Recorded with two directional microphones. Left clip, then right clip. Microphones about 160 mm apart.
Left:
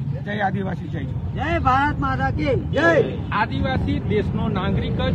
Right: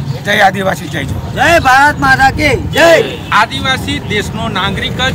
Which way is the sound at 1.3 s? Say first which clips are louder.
Right 13 dB; 30° right (ahead or behind).